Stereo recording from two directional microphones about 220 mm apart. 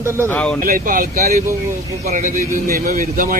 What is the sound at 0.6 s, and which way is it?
Speech, 40° right (ahead or behind).